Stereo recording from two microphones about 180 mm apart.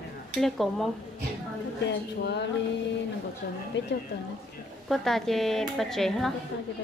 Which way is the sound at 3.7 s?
90° left.